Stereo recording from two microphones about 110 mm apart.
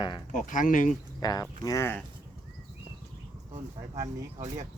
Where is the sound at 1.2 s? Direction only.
35° left (ahead or behind).